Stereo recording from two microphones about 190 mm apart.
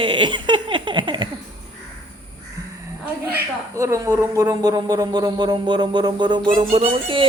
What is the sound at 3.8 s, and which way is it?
Speech, 15° right (ahead or behind).